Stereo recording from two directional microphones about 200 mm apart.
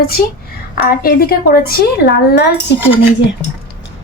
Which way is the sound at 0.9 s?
50° left (ahead or behind).